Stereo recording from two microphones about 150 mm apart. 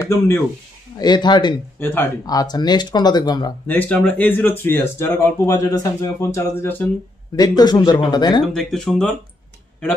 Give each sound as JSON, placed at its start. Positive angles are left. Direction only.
{"t": 0.0, "sound": "speech", "side_deg": 20}
{"t": 0.9, "sound": "speech", "side_deg": 30}
{"t": 1.8, "sound": "speech", "side_deg": 15}
{"t": 2.2, "sound": "speech", "side_deg": 25}
{"t": 3.6, "sound": "speech", "side_deg": 10}
{"t": 7.3, "sound": "speech", "side_deg": 25}
{"t": 8.5, "sound": "speech", "side_deg": 5}